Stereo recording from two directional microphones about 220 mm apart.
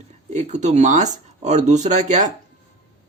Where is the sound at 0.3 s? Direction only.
30° right (ahead or behind).